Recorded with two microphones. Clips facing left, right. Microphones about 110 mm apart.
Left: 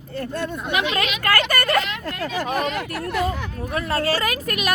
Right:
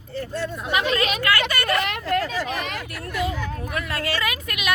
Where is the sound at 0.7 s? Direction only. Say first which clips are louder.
Right 2 dB; 40° right (ahead or behind).